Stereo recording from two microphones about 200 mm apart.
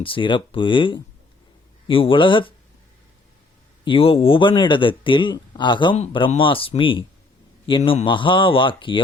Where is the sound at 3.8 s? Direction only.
25° left (ahead or behind).